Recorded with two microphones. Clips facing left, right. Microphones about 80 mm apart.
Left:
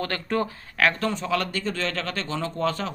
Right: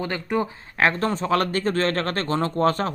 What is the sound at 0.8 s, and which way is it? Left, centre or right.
Speech, right.